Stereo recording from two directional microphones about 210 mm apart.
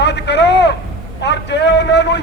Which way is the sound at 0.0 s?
55° left (ahead or behind).